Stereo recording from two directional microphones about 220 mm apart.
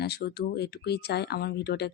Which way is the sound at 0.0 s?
50° left (ahead or behind).